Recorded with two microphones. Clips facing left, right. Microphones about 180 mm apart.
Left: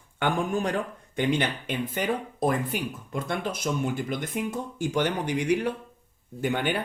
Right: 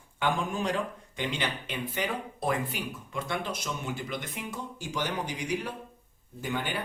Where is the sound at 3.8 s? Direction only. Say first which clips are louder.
Left 6 dB; 50° left (ahead or behind).